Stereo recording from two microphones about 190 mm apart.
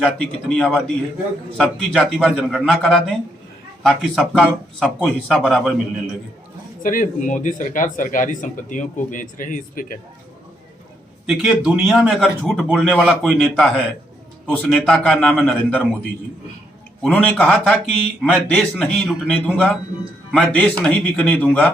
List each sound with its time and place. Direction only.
0.0 s a man's voice: 5° left (ahead or behind)
6.8 s a man's voice: 45° left (ahead or behind)
11.3 s a man's voice: 5° right (ahead or behind)
17.0 s a man's voice: 5° left (ahead or behind)